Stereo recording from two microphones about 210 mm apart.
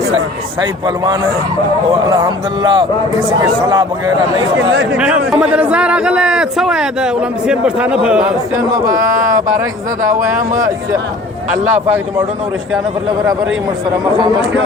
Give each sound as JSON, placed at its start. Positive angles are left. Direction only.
{"t": 0.9, "sound": "a man's voice", "side_deg": -15}
{"t": 4.9, "sound": "a man's voice", "side_deg": -5}